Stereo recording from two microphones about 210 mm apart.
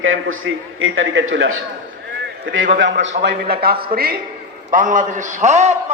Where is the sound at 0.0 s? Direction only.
70° right (ahead or behind).